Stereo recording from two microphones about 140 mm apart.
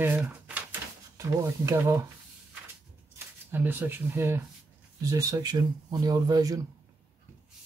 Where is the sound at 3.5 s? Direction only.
15° right (ahead or behind).